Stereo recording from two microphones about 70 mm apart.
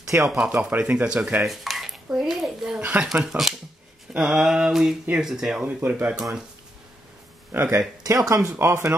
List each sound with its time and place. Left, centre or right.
0.1 s speech: right
0.4 s a sound: centre
0.7 s speech: right
1.4 s dishes: centre
2.1 s speech: centre
2.8 s speech: right
3.3 s speech: centre
4.1 s a sound: centre
5.8 s speech: right
6.1 s a sound: centre
7.5 s speech: right
8.0 s speech: right
8.5 s speech: right